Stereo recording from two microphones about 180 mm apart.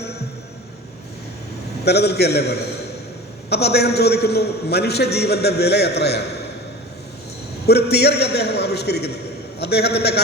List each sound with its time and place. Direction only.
1.8 s a man's voice: 65° left (ahead or behind)
7.7 s a man's voice: 65° left (ahead or behind)